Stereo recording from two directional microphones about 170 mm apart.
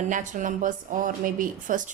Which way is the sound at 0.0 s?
50° right (ahead or behind).